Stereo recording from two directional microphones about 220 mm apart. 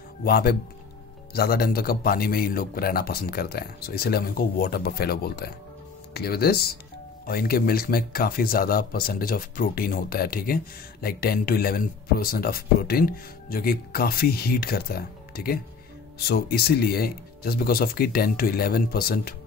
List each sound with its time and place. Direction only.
0.2 s speech: 45° left (ahead or behind)